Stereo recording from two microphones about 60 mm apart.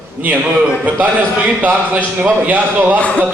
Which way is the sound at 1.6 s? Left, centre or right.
Right.